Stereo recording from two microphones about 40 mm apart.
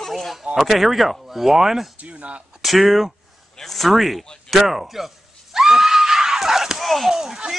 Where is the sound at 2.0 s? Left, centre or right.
Right.